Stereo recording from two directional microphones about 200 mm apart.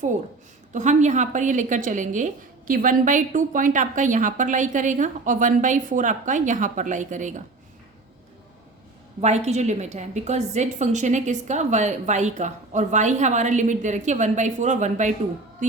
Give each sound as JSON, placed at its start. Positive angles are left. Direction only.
{"t": 0.7, "sound": "a woman's voice", "side_deg": -35}
{"t": 9.2, "sound": "a woman's voice", "side_deg": -35}